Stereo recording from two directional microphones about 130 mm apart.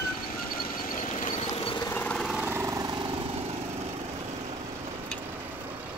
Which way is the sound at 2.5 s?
25° right (ahead or behind).